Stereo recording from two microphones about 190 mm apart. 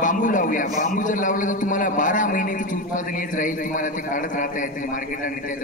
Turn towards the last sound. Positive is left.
turn(degrees=45)  # may be behind; listen again after turning